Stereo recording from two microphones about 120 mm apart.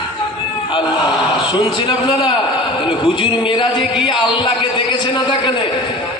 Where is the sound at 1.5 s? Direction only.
40° left (ahead or behind).